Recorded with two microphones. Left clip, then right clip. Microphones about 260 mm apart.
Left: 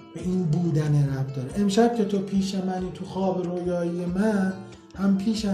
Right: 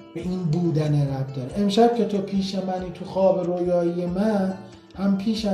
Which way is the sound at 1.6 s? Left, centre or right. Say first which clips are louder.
Right 3 dB; left.